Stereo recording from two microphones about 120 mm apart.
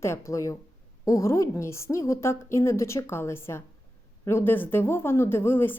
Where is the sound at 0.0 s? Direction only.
20° left (ahead or behind).